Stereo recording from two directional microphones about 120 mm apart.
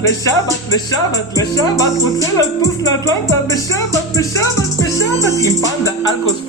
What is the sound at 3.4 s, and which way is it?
Speech, 25° left (ahead or behind).